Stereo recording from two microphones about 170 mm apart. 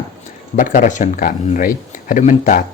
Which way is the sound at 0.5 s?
50° left (ahead or behind).